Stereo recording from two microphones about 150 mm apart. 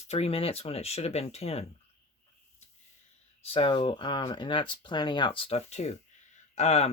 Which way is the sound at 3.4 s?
40° left (ahead or behind).